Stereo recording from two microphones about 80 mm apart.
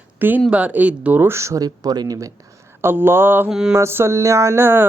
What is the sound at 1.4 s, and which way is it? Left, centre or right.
Mantra, right.